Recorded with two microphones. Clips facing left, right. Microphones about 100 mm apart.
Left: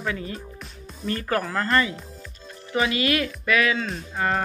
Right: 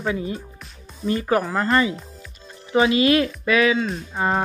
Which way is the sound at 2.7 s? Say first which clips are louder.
Right 6 dB; 25° right (ahead or behind).